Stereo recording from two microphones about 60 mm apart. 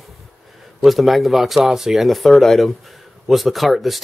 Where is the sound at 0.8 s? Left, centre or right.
Centre.